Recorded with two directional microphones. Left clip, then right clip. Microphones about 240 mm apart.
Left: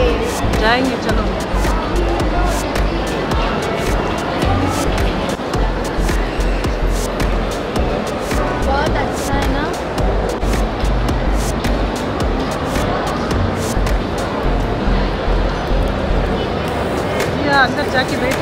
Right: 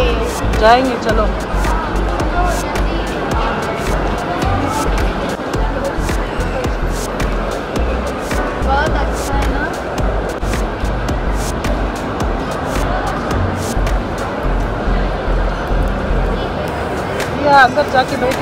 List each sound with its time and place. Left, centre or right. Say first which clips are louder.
0.6 s speech: right 6 dB; centre
17.5 s speech: right 6 dB; centre